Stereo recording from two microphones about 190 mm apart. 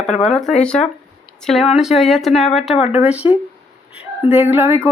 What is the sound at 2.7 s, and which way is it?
Speech, 30° left (ahead or behind).